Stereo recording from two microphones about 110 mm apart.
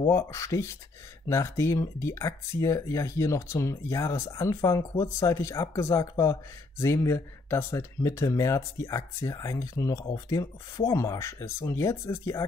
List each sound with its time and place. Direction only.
0.1 s speech: 25° left (ahead or behind)